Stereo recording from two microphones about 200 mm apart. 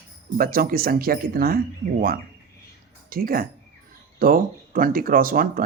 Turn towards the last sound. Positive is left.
turn(degrees=-45)  # may be behind; listen again after turning